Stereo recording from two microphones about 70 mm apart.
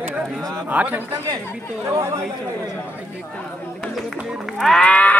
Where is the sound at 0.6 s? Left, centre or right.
Right.